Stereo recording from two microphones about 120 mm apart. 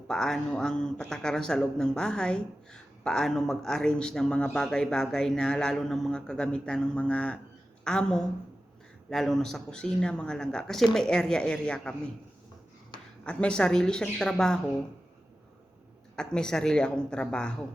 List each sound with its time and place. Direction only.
0.1 s speech: 5° left (ahead or behind)
13.2 s a woman's voice: 10° left (ahead or behind)
16.1 s a woman's voice: 5° left (ahead or behind)